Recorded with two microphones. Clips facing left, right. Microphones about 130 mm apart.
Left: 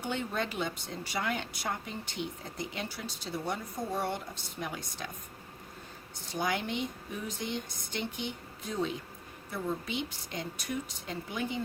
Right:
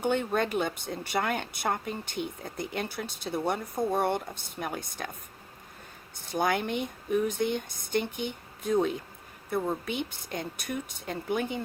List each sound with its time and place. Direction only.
0.0 s speech: 55° right (ahead or behind)
6.3 s speech: 55° right (ahead or behind)